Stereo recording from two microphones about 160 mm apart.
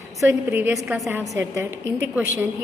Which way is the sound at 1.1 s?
15° right (ahead or behind).